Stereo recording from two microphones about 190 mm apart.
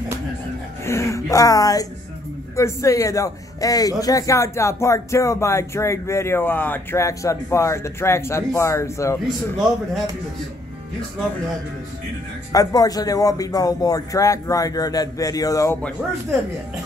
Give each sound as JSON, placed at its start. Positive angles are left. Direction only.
{"t": 0.8, "sound": "speech", "side_deg": 15}
{"t": 12.5, "sound": "speech", "side_deg": 20}